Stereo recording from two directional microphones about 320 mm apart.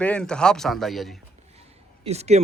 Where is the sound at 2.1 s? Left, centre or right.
Centre.